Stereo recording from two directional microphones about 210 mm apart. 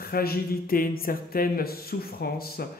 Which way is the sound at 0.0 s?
45° left (ahead or behind).